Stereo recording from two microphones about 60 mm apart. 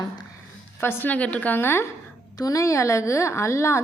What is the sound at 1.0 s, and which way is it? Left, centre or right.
Speech, left.